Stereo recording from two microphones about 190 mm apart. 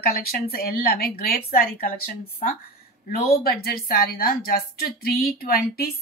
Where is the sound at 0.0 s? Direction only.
50° left (ahead or behind).